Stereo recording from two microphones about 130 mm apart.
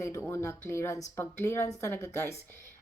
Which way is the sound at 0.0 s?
20° left (ahead or behind).